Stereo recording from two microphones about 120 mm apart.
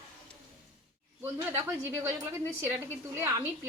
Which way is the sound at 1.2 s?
15° right (ahead or behind).